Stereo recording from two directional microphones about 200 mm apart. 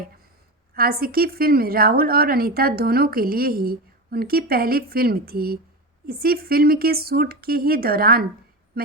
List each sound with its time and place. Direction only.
0.7 s a woman's voice: 50° right (ahead or behind)